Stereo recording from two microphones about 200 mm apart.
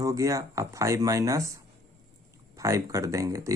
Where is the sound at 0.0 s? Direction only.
15° right (ahead or behind).